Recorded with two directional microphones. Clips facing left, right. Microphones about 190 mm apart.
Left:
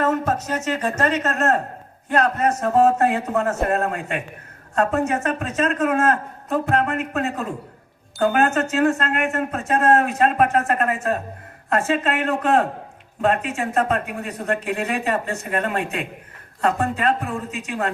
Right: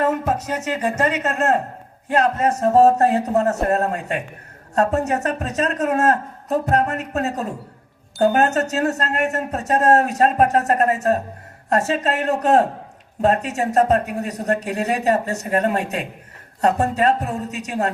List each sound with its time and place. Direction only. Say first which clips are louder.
0.0 s speech: right 1 dB; 15° right (ahead or behind)
2.6 s speech: right 4 dB; 35° right (ahead or behind)